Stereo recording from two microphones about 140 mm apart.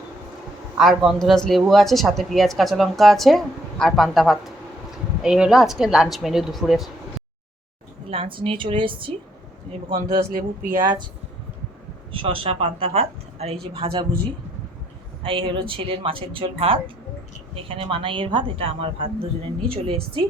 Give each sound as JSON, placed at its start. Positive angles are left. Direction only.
{"t": 0.8, "sound": "speech", "side_deg": 0}
{"t": 8.1, "sound": "a woman's voice", "side_deg": -40}
{"t": 10.3, "sound": "speech", "side_deg": -90}
{"t": 12.1, "sound": "a woman's voice", "side_deg": -40}
{"t": 15.2, "sound": "a woman's voice", "side_deg": -40}